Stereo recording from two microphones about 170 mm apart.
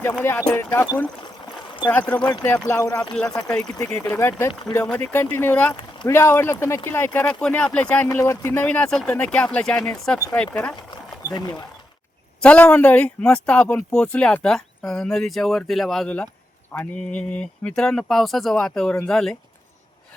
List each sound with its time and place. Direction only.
0.0 s speech: 10° left (ahead or behind)
11.3 s speech: 25° left (ahead or behind)
12.4 s speech: 5° left (ahead or behind)